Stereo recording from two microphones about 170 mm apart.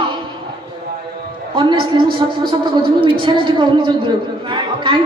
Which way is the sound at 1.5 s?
30° right (ahead or behind).